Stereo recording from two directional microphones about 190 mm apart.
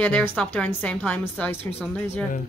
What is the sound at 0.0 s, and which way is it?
A woman's voice, 10° left (ahead or behind).